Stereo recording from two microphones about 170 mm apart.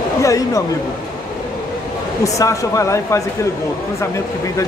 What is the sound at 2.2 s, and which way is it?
Speech, 20° left (ahead or behind).